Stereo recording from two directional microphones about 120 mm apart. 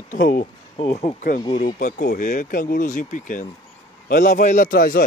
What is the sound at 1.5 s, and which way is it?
Speech, 90° left.